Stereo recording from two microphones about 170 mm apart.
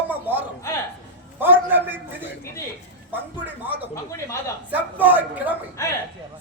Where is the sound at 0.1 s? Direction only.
10° right (ahead or behind).